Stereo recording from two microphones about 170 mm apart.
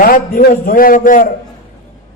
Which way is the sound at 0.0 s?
55° left (ahead or behind).